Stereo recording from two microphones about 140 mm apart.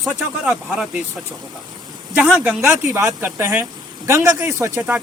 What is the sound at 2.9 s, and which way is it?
Speech, 15° right (ahead or behind).